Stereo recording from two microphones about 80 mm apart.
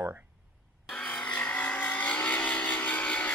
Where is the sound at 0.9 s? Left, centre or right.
Centre.